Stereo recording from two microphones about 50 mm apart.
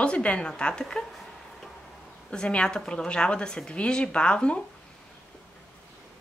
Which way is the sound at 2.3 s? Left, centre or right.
Left.